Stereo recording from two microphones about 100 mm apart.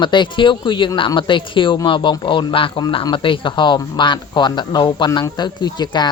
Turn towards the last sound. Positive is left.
turn(degrees=45)  # may be behind; listen again after turning